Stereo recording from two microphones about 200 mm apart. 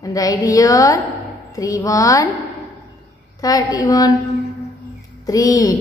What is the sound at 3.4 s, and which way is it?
Speech, 20° left (ahead or behind).